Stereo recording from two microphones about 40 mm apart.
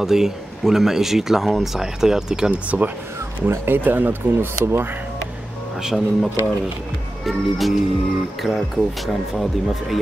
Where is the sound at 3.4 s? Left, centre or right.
Right.